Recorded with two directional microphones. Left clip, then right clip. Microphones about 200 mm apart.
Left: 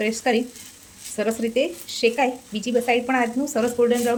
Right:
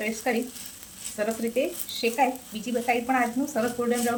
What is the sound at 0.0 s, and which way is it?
Speech, 45° left (ahead or behind).